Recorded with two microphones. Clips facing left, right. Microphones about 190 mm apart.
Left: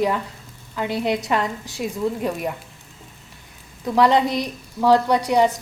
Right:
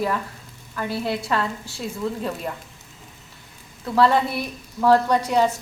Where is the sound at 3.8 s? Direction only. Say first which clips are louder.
Left 2 dB; 15° left (ahead or behind).